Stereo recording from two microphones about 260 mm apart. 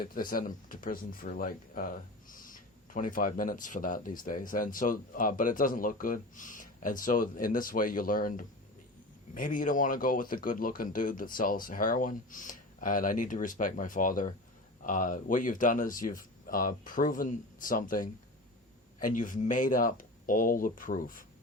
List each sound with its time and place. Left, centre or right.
0.0 s speech: left